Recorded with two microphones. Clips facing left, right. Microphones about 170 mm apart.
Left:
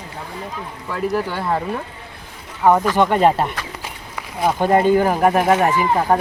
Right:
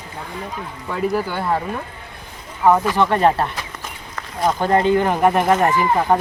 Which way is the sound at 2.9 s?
15° left (ahead or behind).